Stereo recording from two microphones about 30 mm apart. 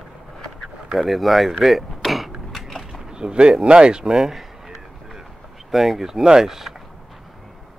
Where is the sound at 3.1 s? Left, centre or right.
Right.